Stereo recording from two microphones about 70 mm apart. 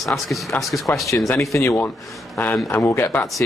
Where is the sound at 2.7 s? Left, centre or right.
Left.